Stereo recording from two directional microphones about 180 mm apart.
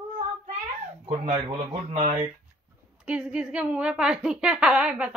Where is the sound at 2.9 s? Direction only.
5° right (ahead or behind).